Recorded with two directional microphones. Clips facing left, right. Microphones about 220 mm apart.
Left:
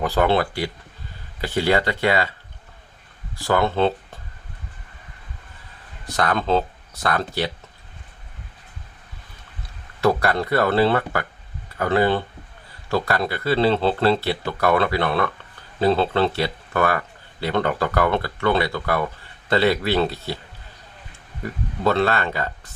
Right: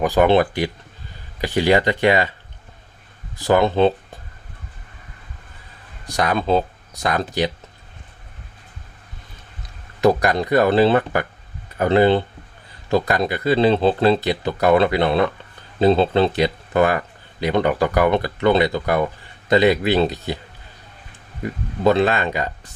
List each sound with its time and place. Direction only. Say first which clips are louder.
0.0 s speech: right 4 dB; 15° right (ahead or behind)
3.3 s speech: right 4 dB; 20° right (ahead or behind)
6.1 s speech: right 2 dB; 15° right (ahead or behind)
10.0 s speech: right 3 dB; 15° right (ahead or behind)
21.4 s speech: right 4 dB; 15° right (ahead or behind)